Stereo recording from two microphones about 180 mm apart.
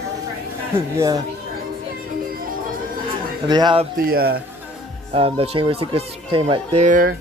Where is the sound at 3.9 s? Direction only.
55° right (ahead or behind).